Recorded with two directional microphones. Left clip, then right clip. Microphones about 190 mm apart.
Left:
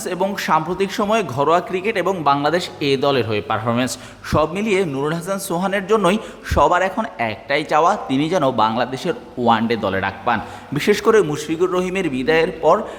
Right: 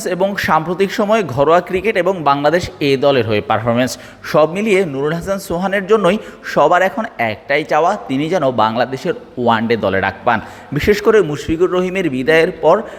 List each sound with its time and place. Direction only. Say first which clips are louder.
0.0 s a man's voice: right 5 dB; 15° right (ahead or behind)